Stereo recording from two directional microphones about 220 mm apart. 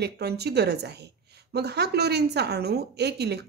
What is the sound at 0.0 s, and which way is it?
A woman's voice, 50° right (ahead or behind).